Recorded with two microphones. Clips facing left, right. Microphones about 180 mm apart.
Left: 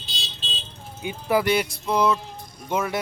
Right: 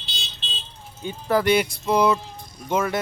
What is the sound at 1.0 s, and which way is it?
Speech, 15° left (ahead or behind).